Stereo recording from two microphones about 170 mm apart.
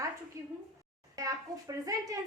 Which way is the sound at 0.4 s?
15° right (ahead or behind).